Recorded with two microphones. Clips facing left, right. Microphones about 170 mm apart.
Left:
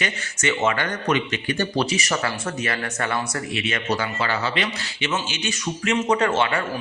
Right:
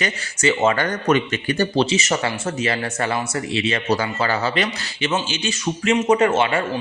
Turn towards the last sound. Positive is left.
turn(degrees=-20)  # may be behind; listen again after turning